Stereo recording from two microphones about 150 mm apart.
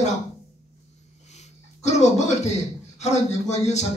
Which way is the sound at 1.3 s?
50° left (ahead or behind).